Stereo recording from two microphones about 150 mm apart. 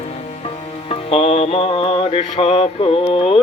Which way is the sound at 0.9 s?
40° left (ahead or behind).